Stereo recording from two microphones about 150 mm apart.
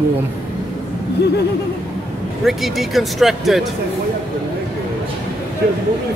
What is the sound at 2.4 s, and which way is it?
Speech, centre (ahead or behind).